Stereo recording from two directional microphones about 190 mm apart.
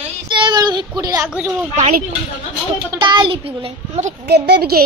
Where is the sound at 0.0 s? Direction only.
25° right (ahead or behind).